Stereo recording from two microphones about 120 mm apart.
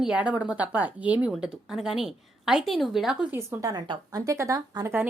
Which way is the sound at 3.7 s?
30° right (ahead or behind).